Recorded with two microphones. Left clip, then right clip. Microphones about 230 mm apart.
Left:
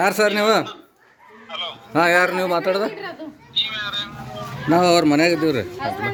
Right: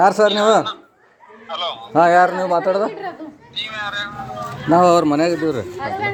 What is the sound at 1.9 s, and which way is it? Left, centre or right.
Speech, centre.